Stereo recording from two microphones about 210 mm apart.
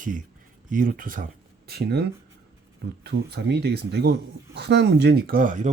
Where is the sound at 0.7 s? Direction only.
40° right (ahead or behind).